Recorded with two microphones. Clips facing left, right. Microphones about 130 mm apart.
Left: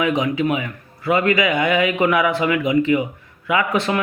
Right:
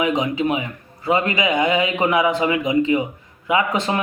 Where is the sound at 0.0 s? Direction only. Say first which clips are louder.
Left 1 dB; 25° right (ahead or behind).